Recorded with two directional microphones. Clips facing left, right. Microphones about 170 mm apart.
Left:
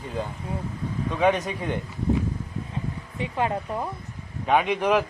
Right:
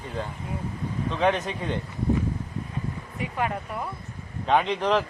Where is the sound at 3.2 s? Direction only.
25° left (ahead or behind).